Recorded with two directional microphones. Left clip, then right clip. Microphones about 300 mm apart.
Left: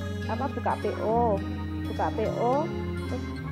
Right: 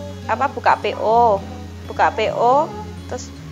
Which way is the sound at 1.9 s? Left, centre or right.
Centre.